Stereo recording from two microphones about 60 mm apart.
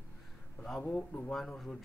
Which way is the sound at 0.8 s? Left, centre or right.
Left.